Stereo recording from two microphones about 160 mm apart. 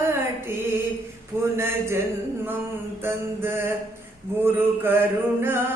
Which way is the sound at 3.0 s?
15° right (ahead or behind).